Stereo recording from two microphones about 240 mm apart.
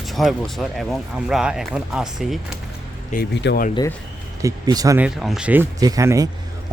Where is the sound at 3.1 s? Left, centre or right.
Left.